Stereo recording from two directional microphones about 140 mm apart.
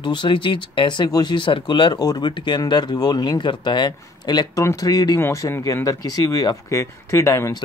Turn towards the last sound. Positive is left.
turn(degrees=20)  # may be behind; listen again after turning